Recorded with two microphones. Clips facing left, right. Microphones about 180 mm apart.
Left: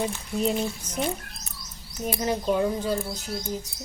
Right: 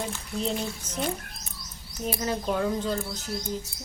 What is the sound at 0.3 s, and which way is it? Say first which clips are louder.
Speech: left 4 dB; 10° left (ahead or behind).